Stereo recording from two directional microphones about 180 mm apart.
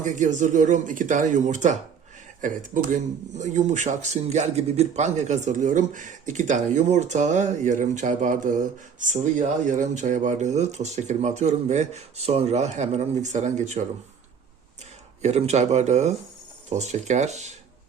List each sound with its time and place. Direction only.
0.0 s speech: 45° right (ahead or behind)
15.2 s speech: 35° right (ahead or behind)